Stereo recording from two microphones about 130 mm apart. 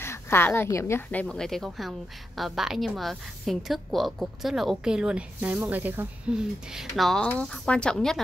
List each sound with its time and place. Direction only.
0.0 s a woman's voice: 20° left (ahead or behind)
1.2 s a woman's voice: 5° left (ahead or behind)